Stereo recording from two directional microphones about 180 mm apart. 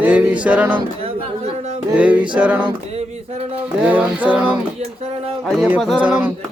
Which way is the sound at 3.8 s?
10° right (ahead or behind).